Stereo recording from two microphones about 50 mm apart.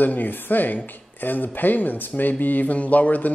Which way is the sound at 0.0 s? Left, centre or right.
Left.